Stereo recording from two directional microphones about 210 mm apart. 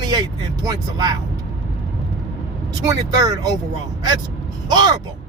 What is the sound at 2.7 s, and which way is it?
Speech, 15° right (ahead or behind).